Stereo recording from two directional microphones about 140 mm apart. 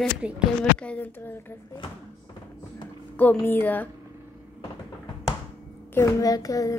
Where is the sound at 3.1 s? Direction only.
10° left (ahead or behind).